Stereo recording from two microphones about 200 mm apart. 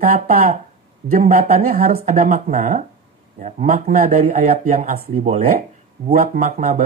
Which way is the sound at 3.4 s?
35° right (ahead or behind).